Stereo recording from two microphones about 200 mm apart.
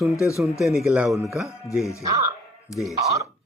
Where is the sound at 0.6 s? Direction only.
Centre (ahead or behind).